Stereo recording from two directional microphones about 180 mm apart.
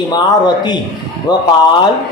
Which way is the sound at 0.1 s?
25° left (ahead or behind).